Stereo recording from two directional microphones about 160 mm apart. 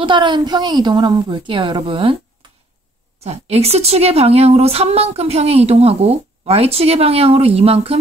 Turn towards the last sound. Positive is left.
turn(degrees=-40)  # may be behind; listen again after turning